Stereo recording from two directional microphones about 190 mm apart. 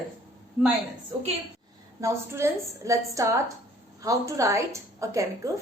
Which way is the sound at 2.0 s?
15° right (ahead or behind).